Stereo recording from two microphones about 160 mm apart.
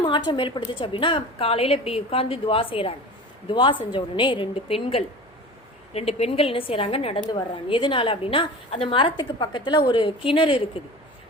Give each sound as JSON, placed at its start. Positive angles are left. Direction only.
{"t": 0.0, "sound": "a woman's voice", "side_deg": 30}